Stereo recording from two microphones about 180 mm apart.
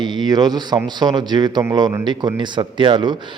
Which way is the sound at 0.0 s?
25° right (ahead or behind).